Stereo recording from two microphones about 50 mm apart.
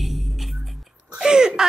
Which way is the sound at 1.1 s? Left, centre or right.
Centre.